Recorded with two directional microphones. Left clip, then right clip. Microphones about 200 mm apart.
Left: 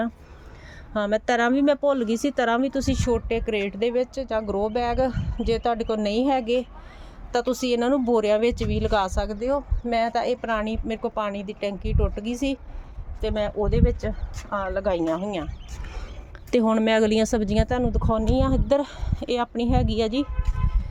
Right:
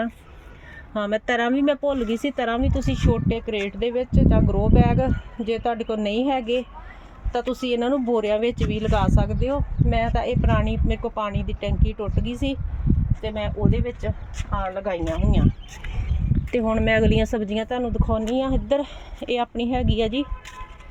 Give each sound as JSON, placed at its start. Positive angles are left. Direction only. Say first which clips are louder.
{"t": 1.1, "sound": "speech", "louder": "left 1 dB", "side_deg": 0}
{"t": 16.5, "sound": "speech", "louder": "left 1 dB", "side_deg": 20}